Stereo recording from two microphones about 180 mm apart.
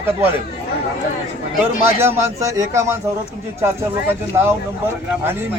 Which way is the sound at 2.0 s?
15° right (ahead or behind).